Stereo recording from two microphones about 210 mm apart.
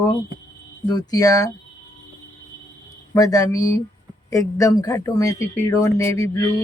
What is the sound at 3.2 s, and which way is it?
Speech, 15° left (ahead or behind).